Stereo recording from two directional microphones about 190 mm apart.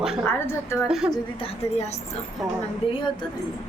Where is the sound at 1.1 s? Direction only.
30° left (ahead or behind).